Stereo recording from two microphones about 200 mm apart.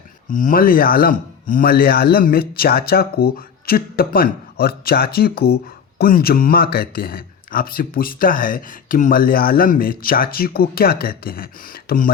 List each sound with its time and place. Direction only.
0.3 s speech: 40° left (ahead or behind)